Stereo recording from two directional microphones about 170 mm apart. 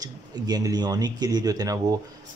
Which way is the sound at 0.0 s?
20° right (ahead or behind).